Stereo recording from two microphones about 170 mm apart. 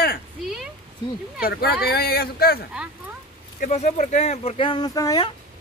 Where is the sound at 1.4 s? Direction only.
65° left (ahead or behind).